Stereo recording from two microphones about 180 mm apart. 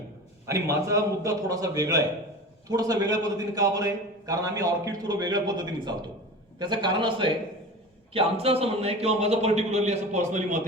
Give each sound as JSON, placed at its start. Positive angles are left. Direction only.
{"t": 0.4, "sound": "a man's voice", "side_deg": -15}